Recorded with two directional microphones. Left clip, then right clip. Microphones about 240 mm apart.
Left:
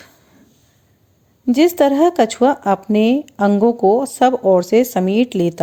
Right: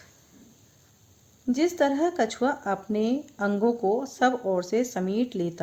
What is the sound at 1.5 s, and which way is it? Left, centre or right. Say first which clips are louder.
Speech: left 11 dB; left.